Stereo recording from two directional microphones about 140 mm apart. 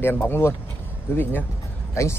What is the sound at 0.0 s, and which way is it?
Speech, 15° left (ahead or behind).